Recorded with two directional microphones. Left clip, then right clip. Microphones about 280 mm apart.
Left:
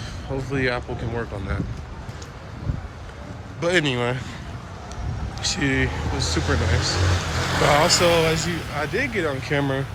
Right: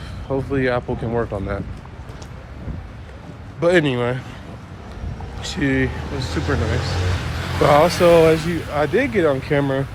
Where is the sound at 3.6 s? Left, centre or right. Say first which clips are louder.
Right 4 dB; centre.